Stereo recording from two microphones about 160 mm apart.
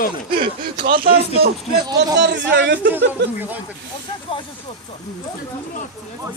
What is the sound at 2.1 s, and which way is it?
Speech, 90° right.